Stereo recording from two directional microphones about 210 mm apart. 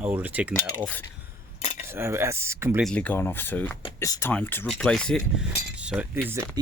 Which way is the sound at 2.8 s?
5° left (ahead or behind).